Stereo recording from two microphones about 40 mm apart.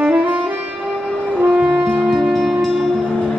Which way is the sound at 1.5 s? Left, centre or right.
Right.